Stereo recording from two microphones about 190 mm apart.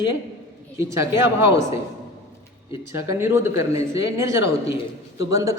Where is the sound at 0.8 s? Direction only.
15° right (ahead or behind).